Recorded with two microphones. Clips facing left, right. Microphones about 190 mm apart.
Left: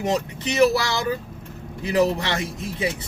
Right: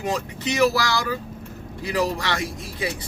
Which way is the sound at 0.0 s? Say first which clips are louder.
Left 2 dB; 20° left (ahead or behind).